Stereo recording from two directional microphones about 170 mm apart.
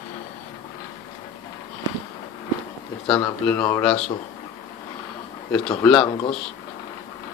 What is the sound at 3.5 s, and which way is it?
Speech, 10° left (ahead or behind).